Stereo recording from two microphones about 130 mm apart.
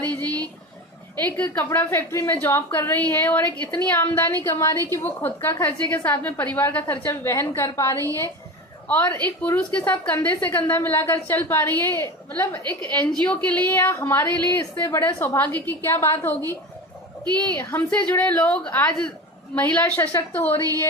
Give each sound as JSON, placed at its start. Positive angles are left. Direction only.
{"t": 1.2, "sound": "a woman's voice", "side_deg": 15}
{"t": 17.6, "sound": "a woman's voice", "side_deg": 15}